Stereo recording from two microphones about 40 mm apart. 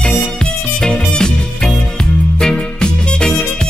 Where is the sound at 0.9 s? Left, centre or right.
Left.